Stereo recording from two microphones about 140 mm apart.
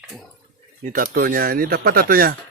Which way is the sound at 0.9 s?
90° right.